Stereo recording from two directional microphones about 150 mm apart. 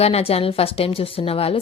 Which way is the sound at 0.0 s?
40° left (ahead or behind).